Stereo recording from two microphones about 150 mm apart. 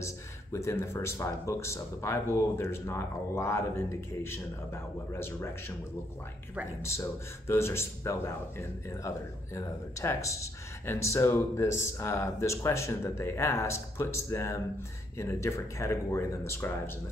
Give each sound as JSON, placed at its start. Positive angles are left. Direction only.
{"t": 0.0, "sound": "speech", "side_deg": 20}
{"t": 6.8, "sound": "speech", "side_deg": 15}